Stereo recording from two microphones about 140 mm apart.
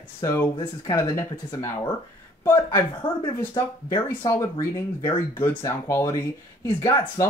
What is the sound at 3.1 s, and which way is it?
Speech, 30° left (ahead or behind).